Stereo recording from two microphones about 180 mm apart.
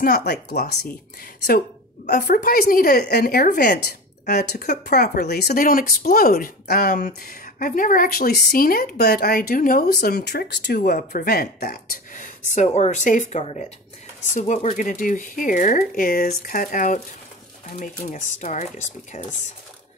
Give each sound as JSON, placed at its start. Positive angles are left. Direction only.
{"t": 0.0, "sound": "speech", "side_deg": 65}
{"t": 2.0, "sound": "speech", "side_deg": 55}
{"t": 4.3, "sound": "speech", "side_deg": 60}
{"t": 10.8, "sound": "speech", "side_deg": 55}